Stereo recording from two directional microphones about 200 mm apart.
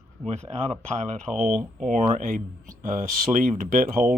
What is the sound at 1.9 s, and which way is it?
Speech, 40° right (ahead or behind).